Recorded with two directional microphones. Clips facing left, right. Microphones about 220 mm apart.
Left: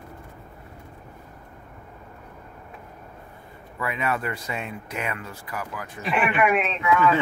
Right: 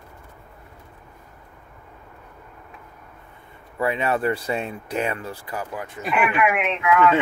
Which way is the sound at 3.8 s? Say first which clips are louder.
Right 5 dB; 30° right (ahead or behind).